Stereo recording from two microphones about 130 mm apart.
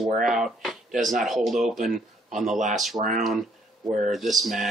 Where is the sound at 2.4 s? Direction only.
70° right (ahead or behind).